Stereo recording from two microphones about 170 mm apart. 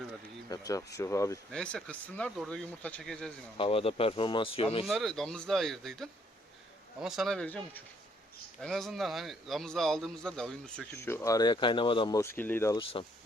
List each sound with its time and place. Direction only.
0.4 s speech: 20° left (ahead or behind)
1.5 s a man's voice: 5° left (ahead or behind)
3.6 s speech: 35° left (ahead or behind)
4.9 s a man's voice: centre (ahead or behind)
10.9 s speech: 15° left (ahead or behind)